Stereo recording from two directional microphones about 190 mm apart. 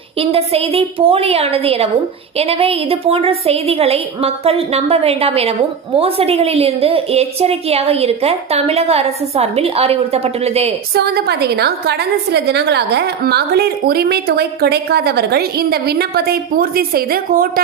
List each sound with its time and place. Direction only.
0.2 s a woman's voice: 30° right (ahead or behind)
11.0 s a woman's voice: 60° right (ahead or behind)